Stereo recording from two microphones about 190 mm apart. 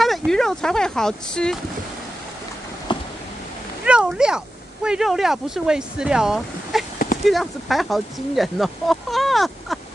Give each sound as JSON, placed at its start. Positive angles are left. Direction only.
{"t": 0.0, "sound": "speech", "side_deg": 0}
{"t": 2.9, "sound": "a sound", "side_deg": 25}
{"t": 3.8, "sound": "speech", "side_deg": -5}